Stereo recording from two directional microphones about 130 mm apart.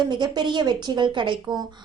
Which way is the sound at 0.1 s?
35° right (ahead or behind).